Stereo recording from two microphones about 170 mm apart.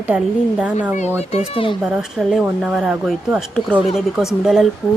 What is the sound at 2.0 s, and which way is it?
A woman's voice, centre (ahead or behind).